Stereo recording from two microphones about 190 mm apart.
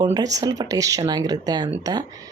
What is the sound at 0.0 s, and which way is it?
Speech, 20° right (ahead or behind).